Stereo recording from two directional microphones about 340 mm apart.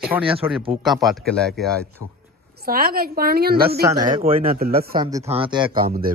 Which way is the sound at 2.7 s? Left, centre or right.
Right.